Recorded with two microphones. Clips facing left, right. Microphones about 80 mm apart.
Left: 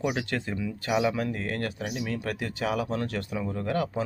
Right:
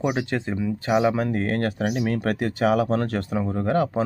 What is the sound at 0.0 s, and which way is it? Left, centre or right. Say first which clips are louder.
Speech: right 5 dB; right.